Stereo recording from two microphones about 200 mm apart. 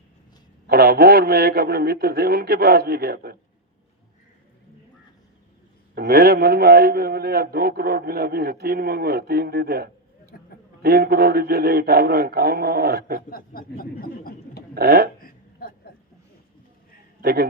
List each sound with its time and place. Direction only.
0.7 s a man's voice: 50° right (ahead or behind)
5.9 s a man's voice: 50° right (ahead or behind)
10.3 s a sound: 45° left (ahead or behind)
10.8 s a man's voice: 50° right (ahead or behind)
13.3 s speech: 45° left (ahead or behind)
14.8 s a man's voice: 50° right (ahead or behind)
15.2 s a sound: 45° left (ahead or behind)
17.2 s a man's voice: 50° right (ahead or behind)